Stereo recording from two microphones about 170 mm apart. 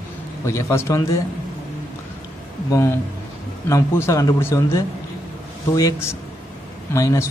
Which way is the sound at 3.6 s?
15° left (ahead or behind).